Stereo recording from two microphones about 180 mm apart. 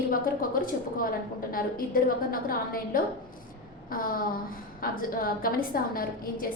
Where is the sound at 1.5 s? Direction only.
50° left (ahead or behind).